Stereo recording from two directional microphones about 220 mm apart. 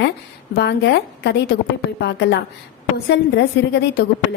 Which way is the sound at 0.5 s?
50° left (ahead or behind).